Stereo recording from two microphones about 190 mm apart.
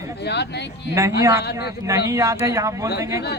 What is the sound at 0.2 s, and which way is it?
Speech, 60° left (ahead or behind).